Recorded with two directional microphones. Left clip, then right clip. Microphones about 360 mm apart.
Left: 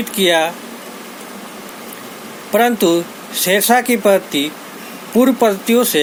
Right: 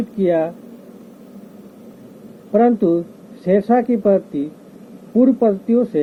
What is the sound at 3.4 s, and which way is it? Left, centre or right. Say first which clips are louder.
Speech: left 2 dB; left.